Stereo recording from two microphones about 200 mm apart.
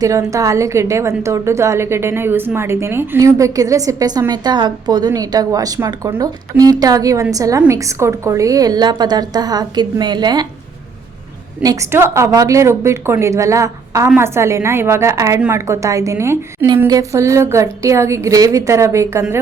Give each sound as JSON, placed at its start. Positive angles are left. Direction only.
{"t": 0.0, "sound": "a woman's voice", "side_deg": -15}
{"t": 11.6, "sound": "a woman's voice", "side_deg": -15}